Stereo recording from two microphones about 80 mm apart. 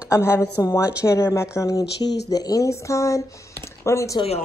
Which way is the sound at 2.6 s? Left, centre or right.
Left.